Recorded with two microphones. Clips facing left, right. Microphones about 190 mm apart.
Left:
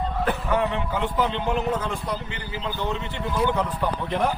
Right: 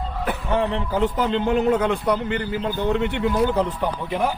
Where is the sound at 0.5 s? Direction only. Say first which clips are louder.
Right 5 dB; 35° right (ahead or behind); by 3.3 s 65° right (ahead or behind).